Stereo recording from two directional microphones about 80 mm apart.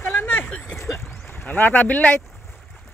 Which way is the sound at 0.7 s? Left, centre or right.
Left.